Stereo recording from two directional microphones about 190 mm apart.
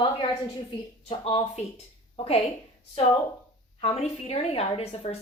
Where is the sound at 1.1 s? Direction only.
30° left (ahead or behind).